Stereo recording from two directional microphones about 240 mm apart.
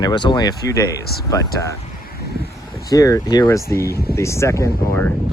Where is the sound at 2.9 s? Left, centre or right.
Centre.